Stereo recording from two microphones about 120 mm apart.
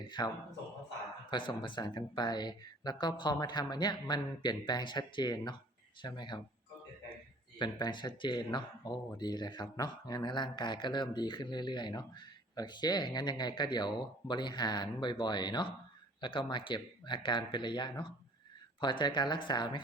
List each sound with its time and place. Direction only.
0.2 s speech: 35° left (ahead or behind)
7.6 s speech: 40° left (ahead or behind)